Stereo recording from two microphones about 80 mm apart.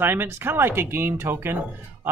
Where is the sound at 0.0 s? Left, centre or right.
Right.